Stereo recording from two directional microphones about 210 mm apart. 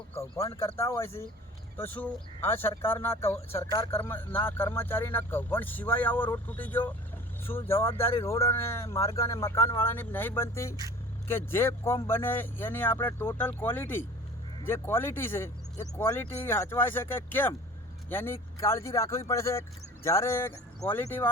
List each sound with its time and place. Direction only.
0.8 s speech: 10° left (ahead or behind)
8.1 s a man's voice: 25° left (ahead or behind)
8.4 s speech: 10° left (ahead or behind)